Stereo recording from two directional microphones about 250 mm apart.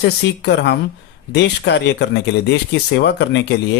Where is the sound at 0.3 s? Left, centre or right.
Left.